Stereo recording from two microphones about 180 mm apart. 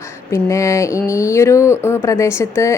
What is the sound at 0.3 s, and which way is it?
A woman's voice, 15° left (ahead or behind).